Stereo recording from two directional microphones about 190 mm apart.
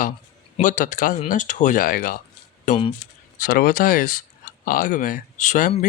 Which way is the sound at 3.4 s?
50° left (ahead or behind).